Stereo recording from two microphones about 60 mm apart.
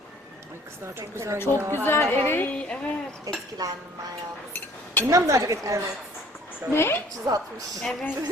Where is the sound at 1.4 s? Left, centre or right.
Left.